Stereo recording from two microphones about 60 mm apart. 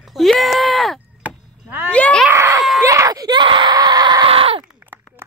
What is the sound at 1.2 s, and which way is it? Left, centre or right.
Chop, right.